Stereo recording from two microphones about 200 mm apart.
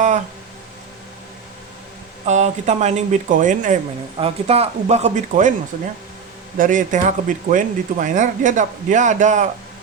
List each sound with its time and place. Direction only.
2.2 s speech: 35° right (ahead or behind)
6.6 s speech: 40° right (ahead or behind)